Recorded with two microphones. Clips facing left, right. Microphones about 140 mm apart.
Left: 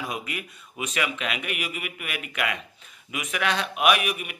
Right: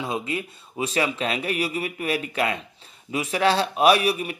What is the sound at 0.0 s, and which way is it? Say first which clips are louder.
Speech: right 5 dB; 25° right (ahead or behind).